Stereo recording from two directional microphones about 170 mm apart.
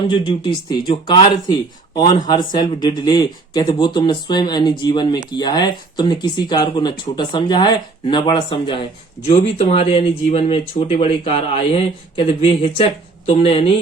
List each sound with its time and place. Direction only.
0.1 s speech: 30° left (ahead or behind)